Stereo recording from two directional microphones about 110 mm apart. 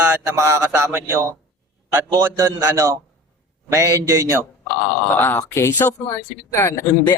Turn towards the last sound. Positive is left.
turn(degrees=20)  # may be behind; listen again after turning